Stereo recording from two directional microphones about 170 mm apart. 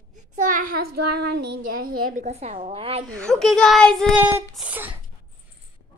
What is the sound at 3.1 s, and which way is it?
Speech, 5° left (ahead or behind).